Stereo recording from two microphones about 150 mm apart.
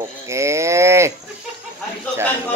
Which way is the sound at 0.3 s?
20° right (ahead or behind).